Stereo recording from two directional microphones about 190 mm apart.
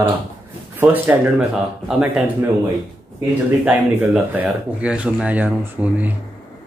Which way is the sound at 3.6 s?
10° right (ahead or behind).